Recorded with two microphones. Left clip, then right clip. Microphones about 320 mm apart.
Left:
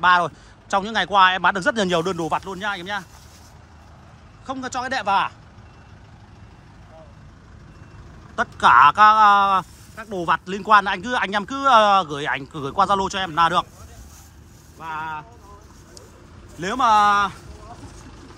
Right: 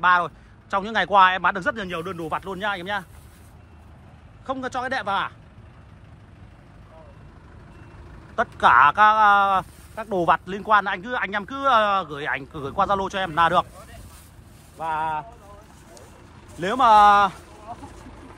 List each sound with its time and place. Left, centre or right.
0.0 s speech: centre
4.5 s speech: centre
8.4 s speech: centre
9.9 s speech: centre
14.8 s speech: centre
16.5 s speech: centre
17.7 s vehicle: right